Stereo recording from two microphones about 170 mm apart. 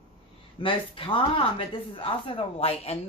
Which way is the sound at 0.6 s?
30° left (ahead or behind).